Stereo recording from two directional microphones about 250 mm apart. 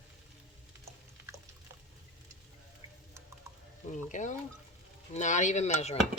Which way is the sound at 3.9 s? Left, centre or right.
Left.